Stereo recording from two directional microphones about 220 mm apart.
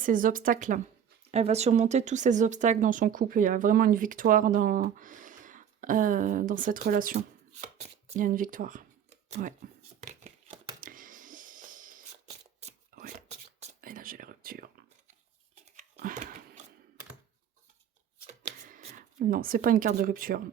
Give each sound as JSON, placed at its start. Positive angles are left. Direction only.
{"t": 0.0, "sound": "speech", "side_deg": -40}
{"t": 10.0, "sound": "scissors", "side_deg": -35}
{"t": 12.9, "sound": "a sound", "side_deg": -40}
{"t": 18.4, "sound": "shuffling cards", "side_deg": -30}
{"t": 19.2, "sound": "speech", "side_deg": -40}